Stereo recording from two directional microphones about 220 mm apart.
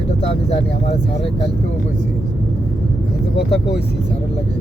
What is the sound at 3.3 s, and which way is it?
Speech, 50° left (ahead or behind).